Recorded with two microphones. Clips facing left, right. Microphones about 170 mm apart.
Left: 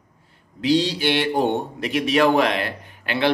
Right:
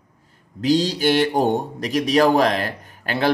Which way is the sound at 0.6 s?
45° right (ahead or behind).